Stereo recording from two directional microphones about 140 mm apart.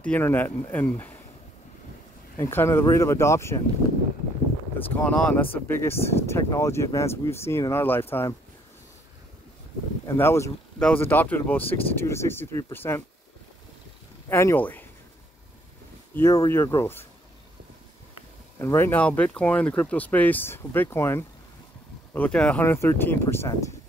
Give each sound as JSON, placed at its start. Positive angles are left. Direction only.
{"t": 0.0, "sound": "speech", "side_deg": 10}
{"t": 2.3, "sound": "speech", "side_deg": 20}
{"t": 4.7, "sound": "speech", "side_deg": 15}
{"t": 10.0, "sound": "speech", "side_deg": 20}
{"t": 14.3, "sound": "speech", "side_deg": 20}
{"t": 16.2, "sound": "speech", "side_deg": 20}
{"t": 18.6, "sound": "speech", "side_deg": 20}